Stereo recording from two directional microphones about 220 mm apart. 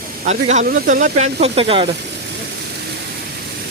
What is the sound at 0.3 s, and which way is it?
Speech, 30° right (ahead or behind).